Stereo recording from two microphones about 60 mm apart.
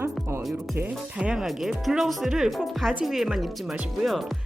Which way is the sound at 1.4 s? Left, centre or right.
Centre.